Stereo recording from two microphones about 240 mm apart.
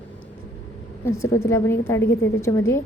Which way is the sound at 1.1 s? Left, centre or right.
Left.